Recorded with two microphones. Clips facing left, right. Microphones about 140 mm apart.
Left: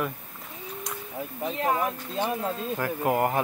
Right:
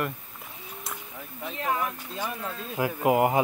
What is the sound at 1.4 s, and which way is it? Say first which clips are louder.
Speech: left 3 dB; 35° left (ahead or behind).